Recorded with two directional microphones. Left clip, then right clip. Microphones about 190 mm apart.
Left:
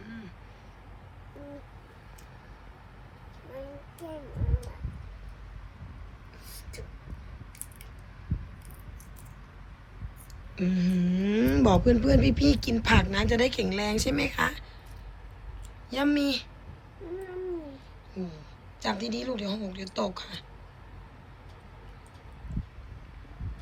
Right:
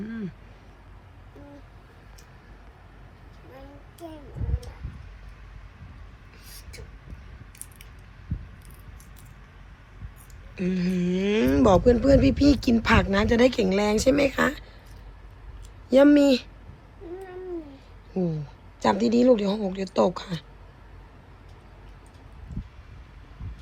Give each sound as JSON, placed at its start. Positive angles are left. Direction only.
{"t": 0.0, "sound": "vehicle", "side_deg": -20}
{"t": 10.6, "sound": "speech", "side_deg": -15}
{"t": 15.9, "sound": "speech", "side_deg": -25}
{"t": 18.2, "sound": "speech", "side_deg": -35}